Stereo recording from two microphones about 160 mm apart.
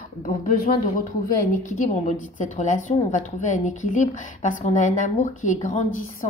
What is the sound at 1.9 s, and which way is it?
A woman's voice, 50° left (ahead or behind).